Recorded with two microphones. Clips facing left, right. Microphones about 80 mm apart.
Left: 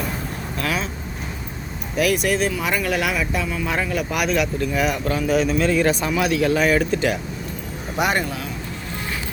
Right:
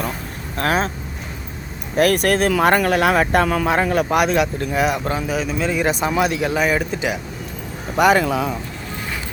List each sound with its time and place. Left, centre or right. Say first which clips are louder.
0.5 s speech: right 6 dB; right
2.0 s speech: right 4 dB; right
3.3 s speech: right 8 dB; right
3.7 s speech: right 6 dB; right
4.8 s speech: right 3 dB; right
5.3 s speech: left 6 dB; centre
7.9 s speech: right 7 dB; right